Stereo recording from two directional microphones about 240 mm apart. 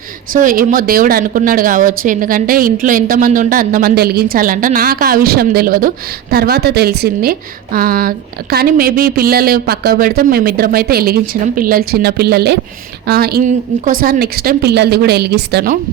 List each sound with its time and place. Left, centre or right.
0.3 s a woman's voice: right